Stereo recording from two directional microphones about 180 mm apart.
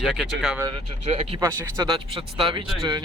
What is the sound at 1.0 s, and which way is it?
Speech, 35° right (ahead or behind).